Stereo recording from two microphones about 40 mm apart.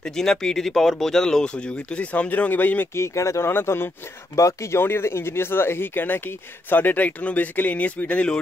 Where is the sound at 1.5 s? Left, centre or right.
Left.